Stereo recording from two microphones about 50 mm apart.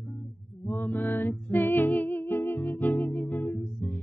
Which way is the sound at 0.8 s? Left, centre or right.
Left.